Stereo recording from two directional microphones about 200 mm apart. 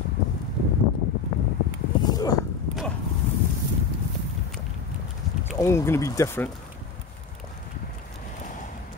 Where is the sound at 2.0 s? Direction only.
20° left (ahead or behind).